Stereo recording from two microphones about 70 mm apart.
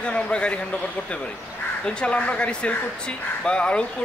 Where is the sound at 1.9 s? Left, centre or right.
Centre.